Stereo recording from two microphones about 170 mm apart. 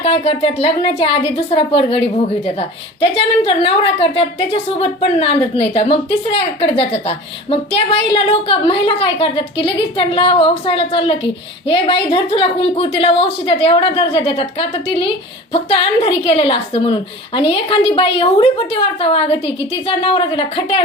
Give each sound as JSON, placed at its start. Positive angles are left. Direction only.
{"t": 0.0, "sound": "a woman's voice", "side_deg": 35}